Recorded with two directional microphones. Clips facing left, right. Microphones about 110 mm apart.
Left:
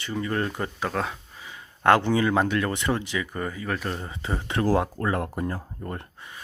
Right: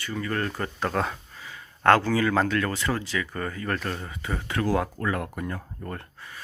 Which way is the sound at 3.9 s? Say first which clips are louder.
Left 1 dB; 25° left (ahead or behind).